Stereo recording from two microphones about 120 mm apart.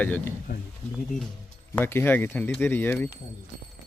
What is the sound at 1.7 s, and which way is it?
Speech, 20° left (ahead or behind).